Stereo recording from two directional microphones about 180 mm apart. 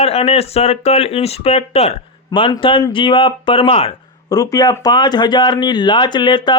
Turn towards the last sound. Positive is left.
turn(degrees=25)  # may be behind; listen again after turning